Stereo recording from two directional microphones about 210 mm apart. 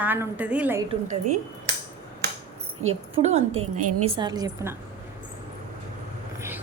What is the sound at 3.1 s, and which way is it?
Speech, 30° right (ahead or behind).